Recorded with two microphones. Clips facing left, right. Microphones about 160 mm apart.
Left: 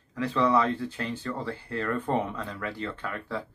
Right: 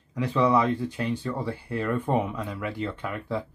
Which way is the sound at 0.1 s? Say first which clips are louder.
Right 2 dB; 15° right (ahead or behind).